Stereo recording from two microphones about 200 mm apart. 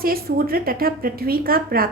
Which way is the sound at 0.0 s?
50° right (ahead or behind).